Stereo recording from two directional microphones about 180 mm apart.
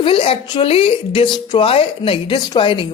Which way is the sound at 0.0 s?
30° left (ahead or behind).